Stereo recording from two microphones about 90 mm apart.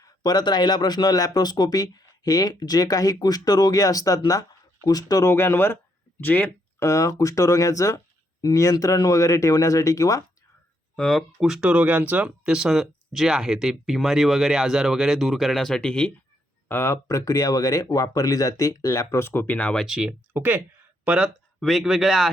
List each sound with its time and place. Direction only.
0.0 s speech: 50° left (ahead or behind)
5.2 s speech: 30° left (ahead or behind)
6.7 s speech: 35° left (ahead or behind)
10.9 s speech: 5° left (ahead or behind)
11.3 s speech: 10° right (ahead or behind); by 16.1 s 10° left (ahead or behind)
16.6 s speech: 30° left (ahead or behind)
19.8 s speech: 10° right (ahead or behind)
20.3 s speech: 20° right (ahead or behind)
21.6 s speech: centre (ahead or behind)